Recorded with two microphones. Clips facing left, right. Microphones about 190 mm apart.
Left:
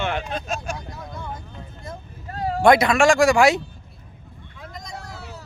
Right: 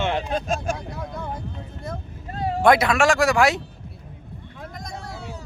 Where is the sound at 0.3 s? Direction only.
50° right (ahead or behind).